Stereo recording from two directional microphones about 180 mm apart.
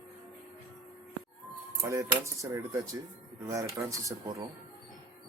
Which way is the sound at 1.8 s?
15° right (ahead or behind).